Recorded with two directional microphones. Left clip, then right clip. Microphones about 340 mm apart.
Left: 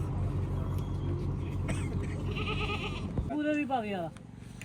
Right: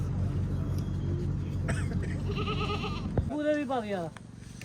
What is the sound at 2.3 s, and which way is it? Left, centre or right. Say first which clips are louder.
Goat: right 1 dB; right.